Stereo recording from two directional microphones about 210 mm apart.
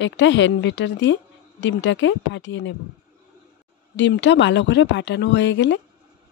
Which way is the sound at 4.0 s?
60° left (ahead or behind).